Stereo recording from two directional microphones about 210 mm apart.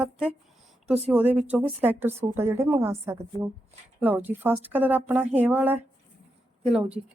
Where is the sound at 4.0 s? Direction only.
10° right (ahead or behind).